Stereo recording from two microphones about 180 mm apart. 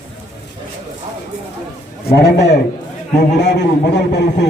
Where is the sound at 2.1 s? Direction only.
65° left (ahead or behind).